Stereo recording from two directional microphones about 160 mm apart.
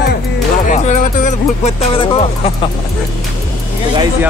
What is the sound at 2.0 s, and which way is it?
Speech, 35° left (ahead or behind).